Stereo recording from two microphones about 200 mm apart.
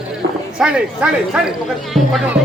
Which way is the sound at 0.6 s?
5° right (ahead or behind).